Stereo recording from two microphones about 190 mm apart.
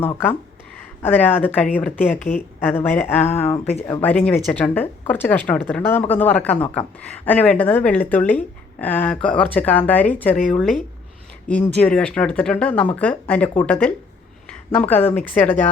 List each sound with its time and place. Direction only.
1.0 s speech: 10° left (ahead or behind)